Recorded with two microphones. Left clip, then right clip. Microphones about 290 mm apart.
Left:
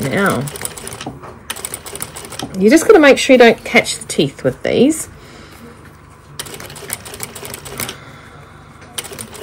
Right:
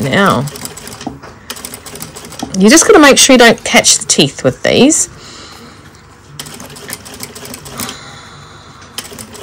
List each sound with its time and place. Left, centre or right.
0.1 s speech: centre
2.5 s a woman's voice: right